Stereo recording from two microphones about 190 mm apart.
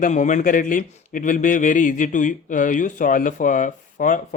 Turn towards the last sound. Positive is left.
turn(degrees=45)  # may be behind; listen again after turning